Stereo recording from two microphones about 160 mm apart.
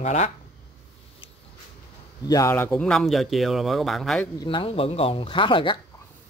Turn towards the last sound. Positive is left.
turn(degrees=30)  # may be behind; listen again after turning